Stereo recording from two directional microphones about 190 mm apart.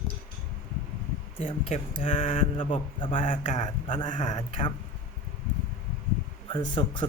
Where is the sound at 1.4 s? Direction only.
30° left (ahead or behind).